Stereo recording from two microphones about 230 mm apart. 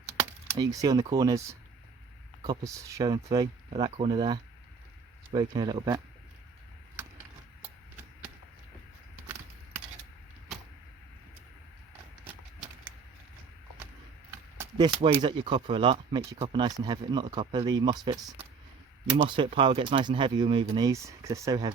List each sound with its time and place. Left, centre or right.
0.5 s speech: centre
14.3 s speech: centre